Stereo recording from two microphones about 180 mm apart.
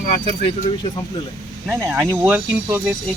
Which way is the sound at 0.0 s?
40° left (ahead or behind).